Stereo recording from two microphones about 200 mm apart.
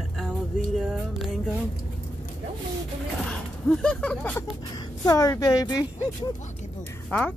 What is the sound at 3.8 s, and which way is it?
Music, 5° left (ahead or behind).